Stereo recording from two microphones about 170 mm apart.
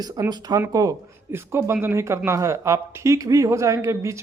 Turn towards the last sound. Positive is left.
turn(degrees=-15)  # may be behind; listen again after turning